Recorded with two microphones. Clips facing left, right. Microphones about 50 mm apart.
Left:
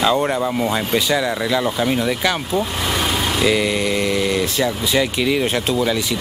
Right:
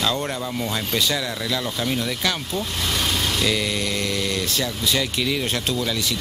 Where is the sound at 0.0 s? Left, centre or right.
Centre.